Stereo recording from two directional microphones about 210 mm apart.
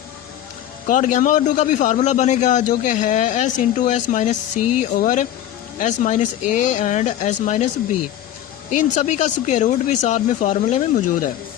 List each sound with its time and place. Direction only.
0.9 s a man's voice: 35° left (ahead or behind)
8.7 s a man's voice: 35° left (ahead or behind)